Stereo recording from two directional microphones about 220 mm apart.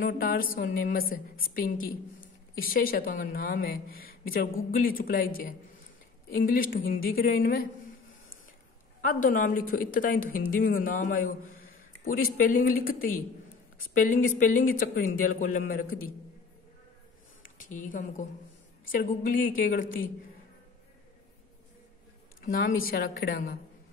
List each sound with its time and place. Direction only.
0.0 s a woman's voice: 40° left (ahead or behind)
9.0 s a woman's voice: 40° left (ahead or behind)
17.4 s a sound: 40° left (ahead or behind)
18.9 s a woman's voice: 40° left (ahead or behind)
22.4 s a woman's voice: 40° left (ahead or behind)